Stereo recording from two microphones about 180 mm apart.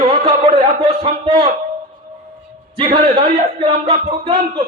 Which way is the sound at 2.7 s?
30° right (ahead or behind).